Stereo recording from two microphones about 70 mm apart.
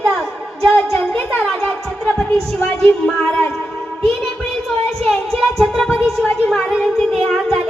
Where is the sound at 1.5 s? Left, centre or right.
Centre.